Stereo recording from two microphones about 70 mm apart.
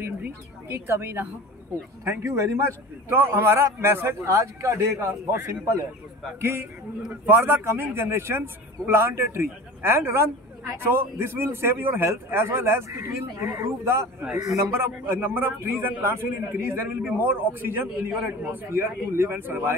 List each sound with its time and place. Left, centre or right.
0.0 s a woman's voice: right
2.0 s a man's voice: right